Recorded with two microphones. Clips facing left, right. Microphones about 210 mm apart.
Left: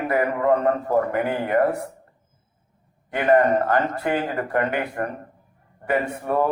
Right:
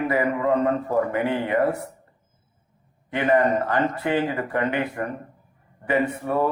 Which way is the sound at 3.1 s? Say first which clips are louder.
Left 2 dB; 50° left (ahead or behind).